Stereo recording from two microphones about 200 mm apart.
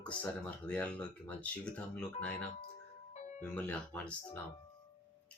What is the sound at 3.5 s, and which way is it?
Speech, 5° left (ahead or behind).